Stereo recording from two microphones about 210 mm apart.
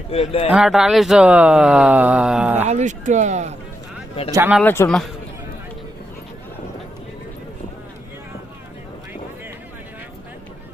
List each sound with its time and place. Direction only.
0.1 s speech: 25° left (ahead or behind)
0.5 s speech: 5° right (ahead or behind)
2.6 s speech: 35° right (ahead or behind)
4.4 s speech: 10° right (ahead or behind)
4.6 s a man's voice: 10° left (ahead or behind)